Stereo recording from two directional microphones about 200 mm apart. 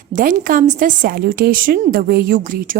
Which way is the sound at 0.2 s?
40° right (ahead or behind).